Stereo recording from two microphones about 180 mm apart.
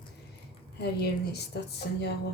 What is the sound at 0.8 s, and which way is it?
Speech, 65° left (ahead or behind).